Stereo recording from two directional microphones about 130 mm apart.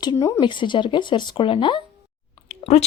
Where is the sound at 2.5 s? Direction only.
55° left (ahead or behind).